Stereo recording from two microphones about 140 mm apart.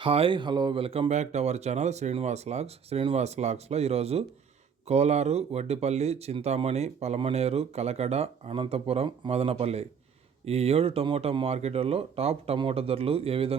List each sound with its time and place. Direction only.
0.0 s speech: 40° right (ahead or behind)